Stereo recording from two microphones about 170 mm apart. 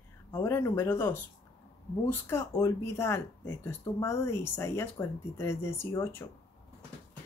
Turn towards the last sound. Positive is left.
turn(degrees=15)  # may be behind; listen again after turning